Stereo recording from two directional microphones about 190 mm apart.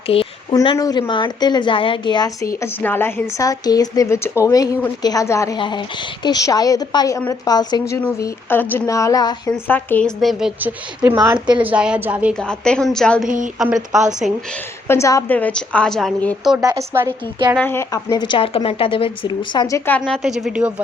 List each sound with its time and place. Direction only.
0.1 s a woman's voice: 30° left (ahead or behind); by 11.6 s 25° right (ahead or behind)
11.6 s a woman's voice: 5° right (ahead or behind)
12.3 s a woman's voice: 5° left (ahead or behind)
13.2 s a woman's voice: 45° right (ahead or behind)
13.6 s a woman's voice: 5° right (ahead or behind)
14.8 s speech: 15° left (ahead or behind)
16.6 s a woman's voice: 15° right (ahead or behind)
17.6 s a woman's voice: 10° left (ahead or behind)
20.0 s a woman's voice: centre (ahead or behind)